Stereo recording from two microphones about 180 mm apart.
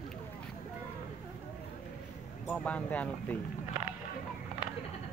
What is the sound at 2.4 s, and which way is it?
Speech, 5° left (ahead or behind).